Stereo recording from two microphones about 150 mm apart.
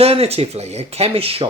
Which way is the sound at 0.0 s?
45° right (ahead or behind).